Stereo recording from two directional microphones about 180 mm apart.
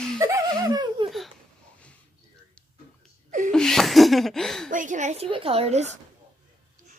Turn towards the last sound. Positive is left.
turn(degrees=-35)  # may be behind; listen again after turning